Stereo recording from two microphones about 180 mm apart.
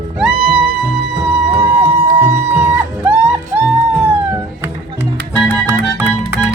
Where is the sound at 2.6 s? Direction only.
10° right (ahead or behind).